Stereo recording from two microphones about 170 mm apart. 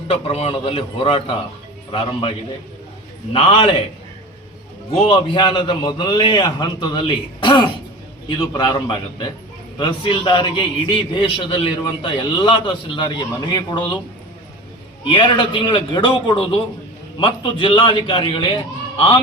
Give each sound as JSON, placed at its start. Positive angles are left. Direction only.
{"t": 0.1, "sound": "a man's voice", "side_deg": 35}
{"t": 3.3, "sound": "a man's voice", "side_deg": 30}
{"t": 4.9, "sound": "a man's voice", "side_deg": 30}
{"t": 15.1, "sound": "a man's voice", "side_deg": 30}